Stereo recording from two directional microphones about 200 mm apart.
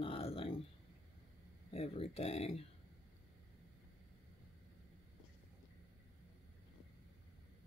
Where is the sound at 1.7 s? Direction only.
30° left (ahead or behind).